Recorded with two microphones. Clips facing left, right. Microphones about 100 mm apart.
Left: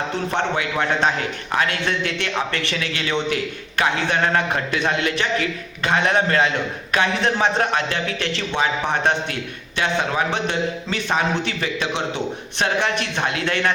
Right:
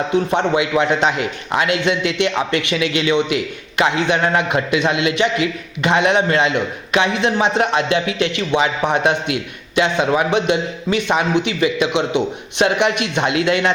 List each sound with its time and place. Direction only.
0.3 s a man's voice: 20° right (ahead or behind)